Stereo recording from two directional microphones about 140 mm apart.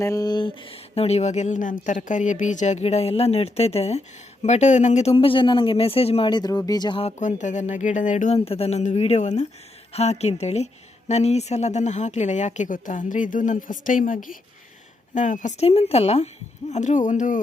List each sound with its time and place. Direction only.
0.0 s speech: 25° left (ahead or behind); by 5.1 s 55° left (ahead or behind)
5.1 s speech: 40° left (ahead or behind)
7.0 s speech: 60° left (ahead or behind)
8.4 s speech: 45° left (ahead or behind); by 14.3 s 75° left (ahead or behind)
15.1 s speech: 65° left (ahead or behind)